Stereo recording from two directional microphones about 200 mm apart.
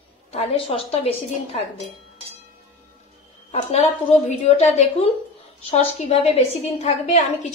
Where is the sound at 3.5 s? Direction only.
30° left (ahead or behind).